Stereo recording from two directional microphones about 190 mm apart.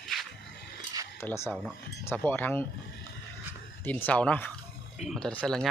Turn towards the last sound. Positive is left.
turn(degrees=0)  # may be behind; listen again after turning